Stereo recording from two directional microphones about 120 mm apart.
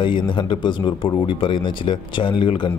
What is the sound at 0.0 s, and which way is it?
Speech, 40° left (ahead or behind).